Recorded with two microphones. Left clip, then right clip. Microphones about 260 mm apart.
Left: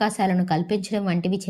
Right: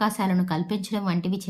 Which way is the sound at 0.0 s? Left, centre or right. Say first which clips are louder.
Left 3 dB; centre.